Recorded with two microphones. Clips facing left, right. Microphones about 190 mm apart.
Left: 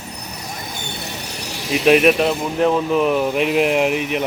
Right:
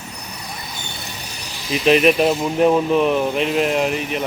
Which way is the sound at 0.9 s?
75° left (ahead or behind).